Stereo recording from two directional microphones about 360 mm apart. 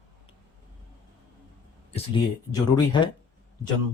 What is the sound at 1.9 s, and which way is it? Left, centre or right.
Speech, centre.